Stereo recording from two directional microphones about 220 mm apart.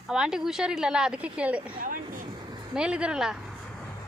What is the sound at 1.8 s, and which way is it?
Speech, 40° right (ahead or behind).